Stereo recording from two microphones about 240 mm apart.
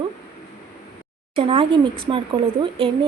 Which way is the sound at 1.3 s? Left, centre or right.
Right.